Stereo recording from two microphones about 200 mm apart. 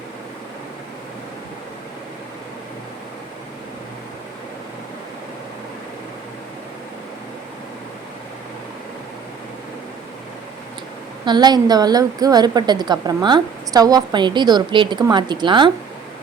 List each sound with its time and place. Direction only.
11.3 s a woman's voice: 20° right (ahead or behind)